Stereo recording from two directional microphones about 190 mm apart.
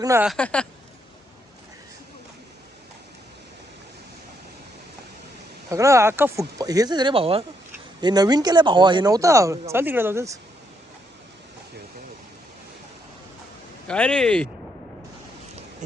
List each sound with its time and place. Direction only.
0.0 s speech: 15° right (ahead or behind)
0.3 s speech: 5° left (ahead or behind)
5.7 s speech: 15° right (ahead or behind)
13.8 s speech: 5° left (ahead or behind)